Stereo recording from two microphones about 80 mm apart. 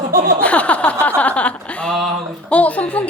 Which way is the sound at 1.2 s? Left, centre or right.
Centre.